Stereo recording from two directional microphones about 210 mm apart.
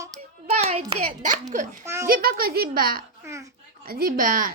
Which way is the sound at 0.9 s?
30° right (ahead or behind).